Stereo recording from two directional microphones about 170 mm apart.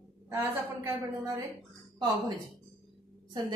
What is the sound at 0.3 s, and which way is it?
A woman's voice, 15° right (ahead or behind).